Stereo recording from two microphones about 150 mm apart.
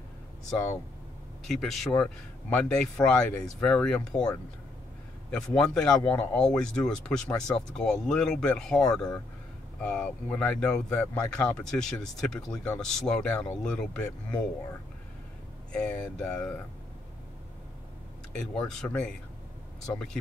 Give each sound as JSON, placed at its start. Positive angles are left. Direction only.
{"t": 1.5, "sound": "speech", "side_deg": 0}
{"t": 15.7, "sound": "speech", "side_deg": 5}
{"t": 18.3, "sound": "speech", "side_deg": 5}